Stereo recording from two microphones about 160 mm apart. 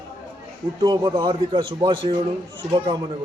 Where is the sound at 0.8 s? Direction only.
25° right (ahead or behind).